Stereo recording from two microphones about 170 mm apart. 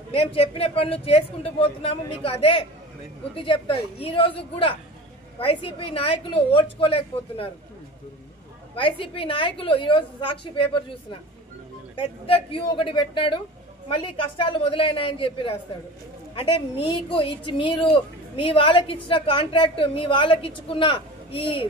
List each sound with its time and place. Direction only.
0.1 s a woman's voice: 35° left (ahead or behind)
8.7 s a woman's voice: 30° left (ahead or behind)